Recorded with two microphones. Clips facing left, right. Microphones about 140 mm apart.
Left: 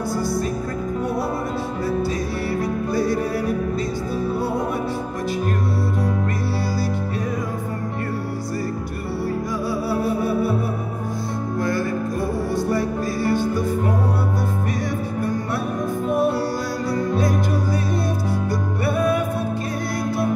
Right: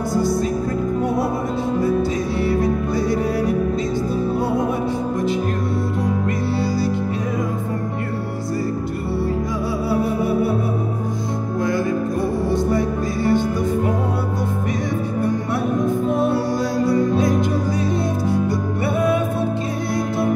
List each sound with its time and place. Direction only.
0.1 s music: 20° right (ahead or behind)
2.4 s music: 20° right (ahead or behind)
9.8 s music: 20° right (ahead or behind)
12.4 s music: 20° right (ahead or behind)
16.9 s music: 20° right (ahead or behind)
18.5 s music: 20° right (ahead or behind)